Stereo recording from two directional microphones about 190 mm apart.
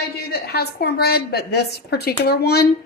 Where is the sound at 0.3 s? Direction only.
55° left (ahead or behind).